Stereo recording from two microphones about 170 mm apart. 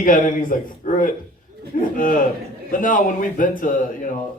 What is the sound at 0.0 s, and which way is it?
A man's voice, 50° left (ahead or behind).